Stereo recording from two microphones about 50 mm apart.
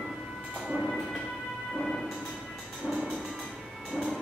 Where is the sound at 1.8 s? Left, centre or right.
Centre.